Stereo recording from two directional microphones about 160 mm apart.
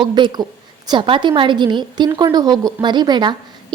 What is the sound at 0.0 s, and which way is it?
A woman's voice, 30° right (ahead or behind).